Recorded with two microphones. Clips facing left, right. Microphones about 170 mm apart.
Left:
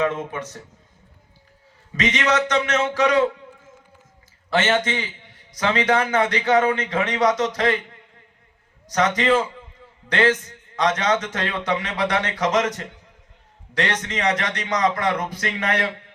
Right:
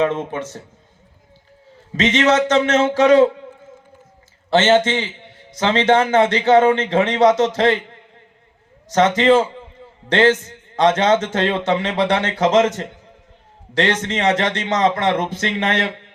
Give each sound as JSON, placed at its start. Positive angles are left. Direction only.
{"t": 0.0, "sound": "a man's voice", "side_deg": -30}
{"t": 1.9, "sound": "a man's voice", "side_deg": -30}
{"t": 4.4, "sound": "a man's voice", "side_deg": -25}
{"t": 8.9, "sound": "a man's voice", "side_deg": -25}